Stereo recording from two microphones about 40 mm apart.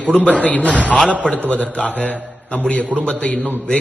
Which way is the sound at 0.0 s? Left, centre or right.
Left.